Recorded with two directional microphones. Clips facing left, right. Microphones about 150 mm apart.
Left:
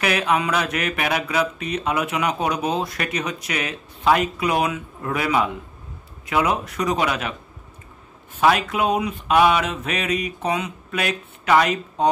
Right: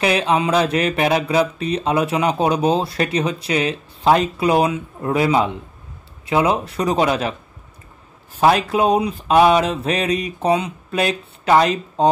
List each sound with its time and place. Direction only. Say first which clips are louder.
0.0 s speech: right 3 dB; 30° right (ahead or behind)
8.4 s speech: right 3 dB; 30° right (ahead or behind)